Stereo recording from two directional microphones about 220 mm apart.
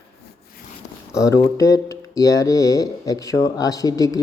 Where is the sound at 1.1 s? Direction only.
15° left (ahead or behind).